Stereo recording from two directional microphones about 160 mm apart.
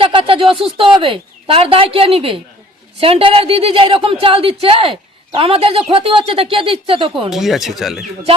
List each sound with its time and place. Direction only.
0.0 s a woman's voice: 35° right (ahead or behind)
7.3 s speech: centre (ahead or behind)